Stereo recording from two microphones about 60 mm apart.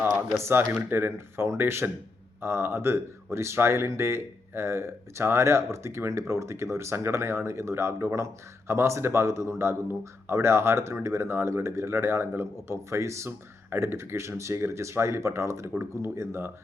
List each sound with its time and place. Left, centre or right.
0.3 s speech: right